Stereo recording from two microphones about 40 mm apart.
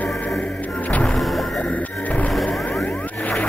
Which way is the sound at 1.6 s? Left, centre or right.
Left.